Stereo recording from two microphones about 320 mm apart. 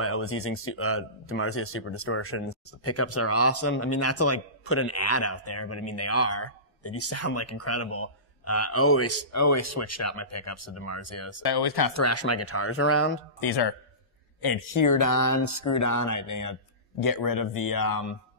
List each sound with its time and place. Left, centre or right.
0.0 s speech: left
14.4 s speech: left
17.0 s speech: left